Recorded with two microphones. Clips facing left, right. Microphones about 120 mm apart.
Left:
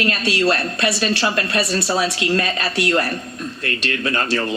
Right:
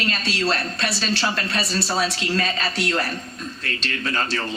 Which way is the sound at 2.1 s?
55° left (ahead or behind).